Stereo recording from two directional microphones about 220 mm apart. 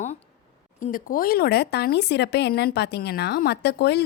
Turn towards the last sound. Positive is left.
turn(degrees=50)  # may be behind; listen again after turning